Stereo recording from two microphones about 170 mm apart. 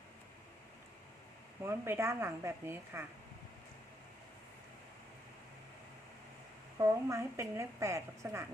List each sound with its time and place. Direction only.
1.6 s a woman's voice: 15° right (ahead or behind)
6.7 s a woman's voice: 15° right (ahead or behind)